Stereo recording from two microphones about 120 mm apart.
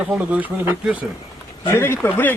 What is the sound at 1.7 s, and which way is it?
Speech, 20° left (ahead or behind).